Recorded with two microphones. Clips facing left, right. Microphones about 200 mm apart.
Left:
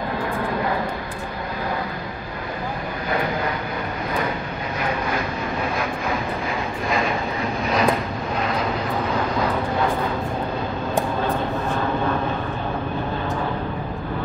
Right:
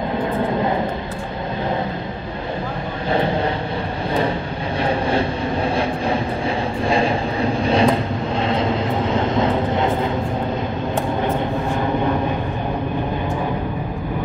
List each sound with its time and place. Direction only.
3.1 s vehicle: 30° right (ahead or behind)
4.8 s vehicle: 30° right (ahead or behind)
11.2 s a sound: 15° right (ahead or behind)